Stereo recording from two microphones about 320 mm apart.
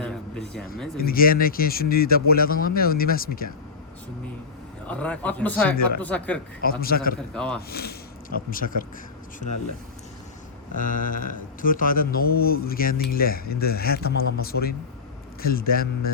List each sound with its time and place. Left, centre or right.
0.0 s a sound: centre
0.9 s speech: left
4.9 s a man's voice: centre
6.8 s speech: left
7.3 s a man's voice: centre
7.7 s speech: left
10.8 s speech: left